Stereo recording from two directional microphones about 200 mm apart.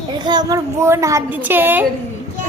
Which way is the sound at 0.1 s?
20° right (ahead or behind).